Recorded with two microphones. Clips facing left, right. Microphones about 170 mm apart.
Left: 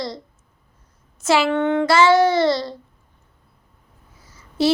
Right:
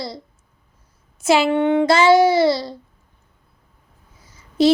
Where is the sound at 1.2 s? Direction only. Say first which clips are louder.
Right 2 dB; 15° right (ahead or behind).